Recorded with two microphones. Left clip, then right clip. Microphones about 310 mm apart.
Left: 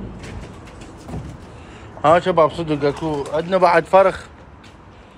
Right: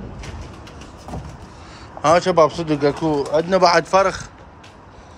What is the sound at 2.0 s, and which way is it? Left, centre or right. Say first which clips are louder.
Speech: even; centre.